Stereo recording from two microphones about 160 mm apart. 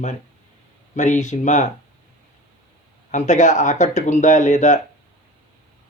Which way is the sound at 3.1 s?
50° left (ahead or behind).